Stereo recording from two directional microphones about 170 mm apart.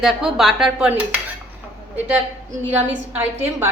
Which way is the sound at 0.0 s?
5° right (ahead or behind).